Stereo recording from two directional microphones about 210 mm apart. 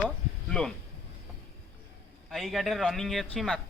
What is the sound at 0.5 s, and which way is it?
Speech, 5° left (ahead or behind).